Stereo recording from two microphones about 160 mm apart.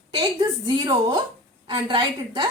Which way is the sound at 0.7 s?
25° right (ahead or behind).